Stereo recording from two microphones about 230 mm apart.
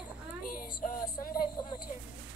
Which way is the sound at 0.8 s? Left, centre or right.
Left.